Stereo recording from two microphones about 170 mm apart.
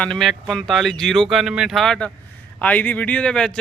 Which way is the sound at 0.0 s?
Centre (ahead or behind).